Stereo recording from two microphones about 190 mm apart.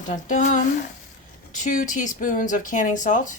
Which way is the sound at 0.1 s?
40° left (ahead or behind).